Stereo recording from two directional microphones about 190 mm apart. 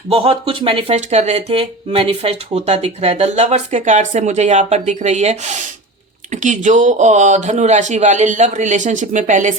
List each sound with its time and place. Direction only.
0.1 s speech: 30° right (ahead or behind)